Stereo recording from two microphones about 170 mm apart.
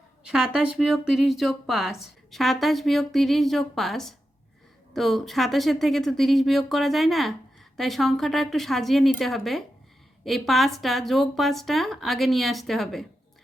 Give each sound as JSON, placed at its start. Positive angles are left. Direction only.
{"t": 0.3, "sound": "speech", "side_deg": -5}